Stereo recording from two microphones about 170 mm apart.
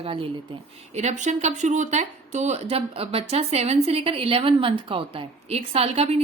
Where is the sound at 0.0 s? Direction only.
35° right (ahead or behind).